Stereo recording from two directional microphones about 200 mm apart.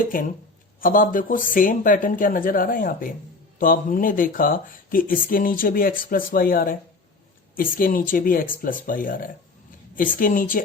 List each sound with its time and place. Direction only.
0.0 s speech: 45° left (ahead or behind)